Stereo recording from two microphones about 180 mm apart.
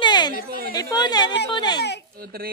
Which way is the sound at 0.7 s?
20° left (ahead or behind).